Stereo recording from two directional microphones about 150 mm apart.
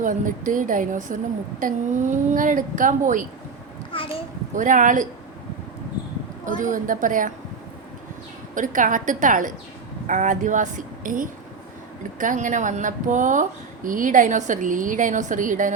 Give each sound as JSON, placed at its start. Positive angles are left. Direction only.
{"t": 0.0, "sound": "a woman's voice", "side_deg": -60}
{"t": 3.9, "sound": "a child's voice", "side_deg": 35}
{"t": 4.5, "sound": "a woman's voice", "side_deg": -60}
{"t": 6.6, "sound": "a woman's voice", "side_deg": -60}
{"t": 8.5, "sound": "a woman's voice", "side_deg": -60}